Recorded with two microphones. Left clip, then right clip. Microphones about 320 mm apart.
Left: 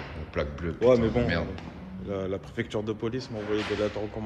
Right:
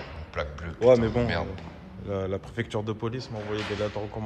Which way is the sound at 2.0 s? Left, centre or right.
Right.